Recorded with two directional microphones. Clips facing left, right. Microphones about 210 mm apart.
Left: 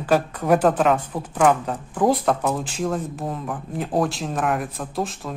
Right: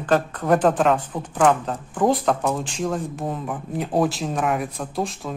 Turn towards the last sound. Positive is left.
turn(degrees=0)  # may be behind; listen again after turning